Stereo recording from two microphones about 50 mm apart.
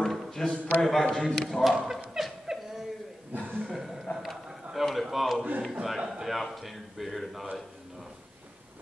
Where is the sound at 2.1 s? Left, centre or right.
Centre.